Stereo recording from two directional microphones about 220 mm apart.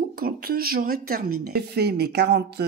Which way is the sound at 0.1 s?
45° right (ahead or behind).